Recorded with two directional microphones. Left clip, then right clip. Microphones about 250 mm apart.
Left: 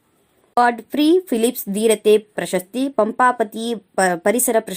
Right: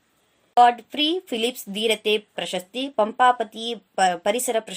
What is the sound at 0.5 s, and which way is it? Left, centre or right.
Speech, centre.